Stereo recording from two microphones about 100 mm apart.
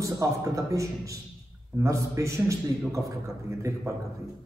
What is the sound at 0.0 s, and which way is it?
A man's voice, 35° right (ahead or behind).